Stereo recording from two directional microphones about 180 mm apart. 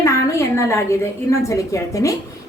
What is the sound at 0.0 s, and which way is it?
A woman's voice, 15° left (ahead or behind).